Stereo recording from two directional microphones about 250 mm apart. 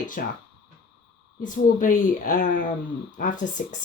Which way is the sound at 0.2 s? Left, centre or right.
Left.